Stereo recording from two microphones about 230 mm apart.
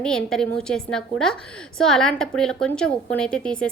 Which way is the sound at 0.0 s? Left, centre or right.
Centre.